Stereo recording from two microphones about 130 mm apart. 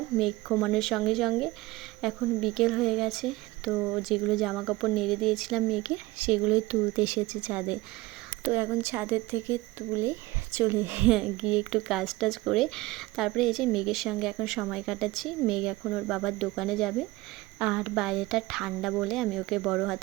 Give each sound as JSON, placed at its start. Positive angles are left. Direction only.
{"t": 0.2, "sound": "speech", "side_deg": 0}